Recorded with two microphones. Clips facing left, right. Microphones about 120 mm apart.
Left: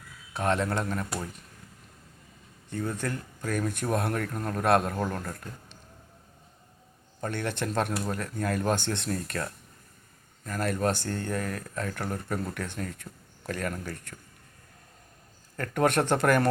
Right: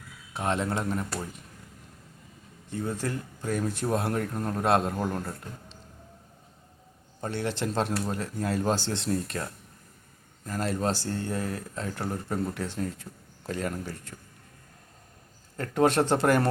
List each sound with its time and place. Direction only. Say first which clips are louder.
0.3 s speech: left 1 dB; 20° right (ahead or behind)
2.6 s speech: even; 25° right (ahead or behind)
7.2 s speech: right 1 dB; 25° right (ahead or behind)
15.5 s speech: right 2 dB; 25° right (ahead or behind)